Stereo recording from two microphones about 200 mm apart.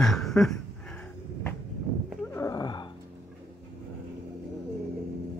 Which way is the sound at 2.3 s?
15° left (ahead or behind).